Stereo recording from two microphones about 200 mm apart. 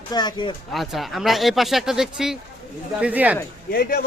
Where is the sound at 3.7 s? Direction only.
50° left (ahead or behind).